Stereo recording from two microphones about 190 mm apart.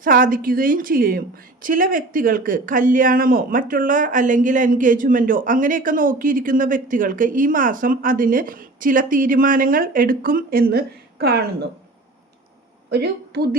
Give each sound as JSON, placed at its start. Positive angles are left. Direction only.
{"t": 0.0, "sound": "speech", "side_deg": -45}
{"t": 12.9, "sound": "a woman's voice", "side_deg": -60}